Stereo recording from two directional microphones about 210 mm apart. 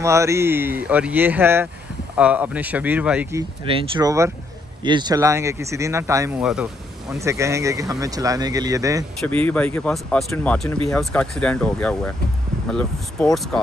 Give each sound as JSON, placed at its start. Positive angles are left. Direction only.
{"t": 0.0, "sound": "speech", "side_deg": -15}
{"t": 3.6, "sound": "speech", "side_deg": -20}
{"t": 7.2, "sound": "speech", "side_deg": -15}
{"t": 9.2, "sound": "speech", "side_deg": 5}